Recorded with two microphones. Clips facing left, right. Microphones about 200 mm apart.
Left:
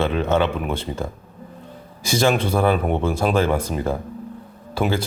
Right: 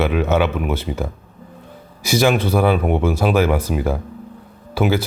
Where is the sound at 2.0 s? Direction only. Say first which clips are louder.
Right 2 dB; 10° right (ahead or behind).